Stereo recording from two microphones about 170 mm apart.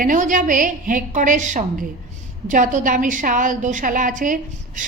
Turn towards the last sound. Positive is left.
turn(degrees=-50)  # may be behind; listen again after turning